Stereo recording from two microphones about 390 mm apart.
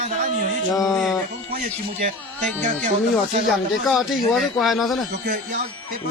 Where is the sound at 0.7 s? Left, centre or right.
Centre.